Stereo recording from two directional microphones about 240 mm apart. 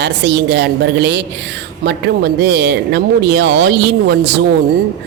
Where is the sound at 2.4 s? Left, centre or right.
Right.